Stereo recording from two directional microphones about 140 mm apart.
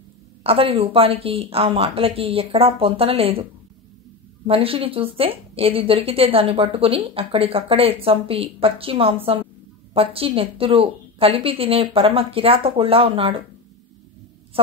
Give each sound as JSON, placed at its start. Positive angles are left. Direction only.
{"t": 0.4, "sound": "a woman's voice", "side_deg": -40}
{"t": 4.5, "sound": "speech", "side_deg": -40}